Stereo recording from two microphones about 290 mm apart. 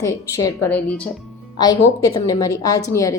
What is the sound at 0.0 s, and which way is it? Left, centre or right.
A woman's voice, centre.